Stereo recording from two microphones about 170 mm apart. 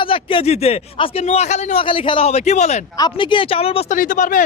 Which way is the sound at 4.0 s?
50° left (ahead or behind).